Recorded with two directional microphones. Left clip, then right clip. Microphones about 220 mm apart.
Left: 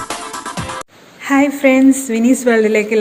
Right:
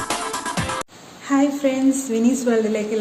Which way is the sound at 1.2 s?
40° left (ahead or behind).